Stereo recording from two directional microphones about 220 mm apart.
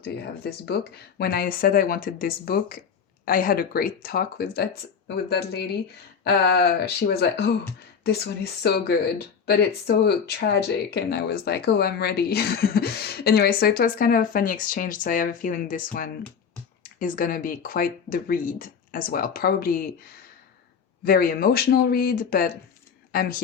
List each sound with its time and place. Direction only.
0.0 s speech: 45° left (ahead or behind)
21.0 s speech: 40° left (ahead or behind)